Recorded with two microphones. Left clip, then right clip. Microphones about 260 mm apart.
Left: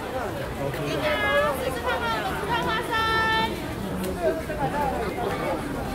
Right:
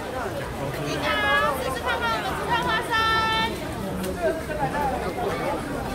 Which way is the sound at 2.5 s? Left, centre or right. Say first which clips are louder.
Right 3 dB; right.